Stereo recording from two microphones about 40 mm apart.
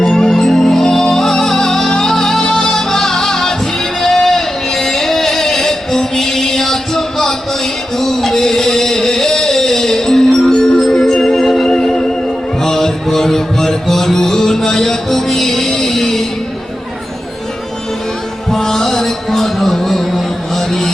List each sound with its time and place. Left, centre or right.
0.0 s music: centre
18.5 s music: centre